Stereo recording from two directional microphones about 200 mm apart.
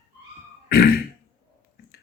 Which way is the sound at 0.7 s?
50° left (ahead or behind).